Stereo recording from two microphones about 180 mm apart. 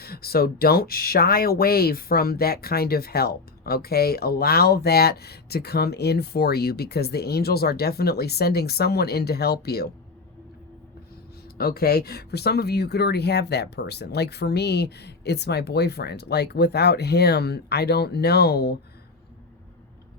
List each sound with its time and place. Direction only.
0.0 s speech: 60° left (ahead or behind)
11.5 s speech: 55° left (ahead or behind)